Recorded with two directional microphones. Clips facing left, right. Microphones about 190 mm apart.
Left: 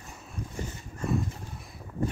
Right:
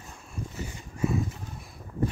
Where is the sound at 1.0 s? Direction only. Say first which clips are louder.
Right 2 dB; centre (ahead or behind).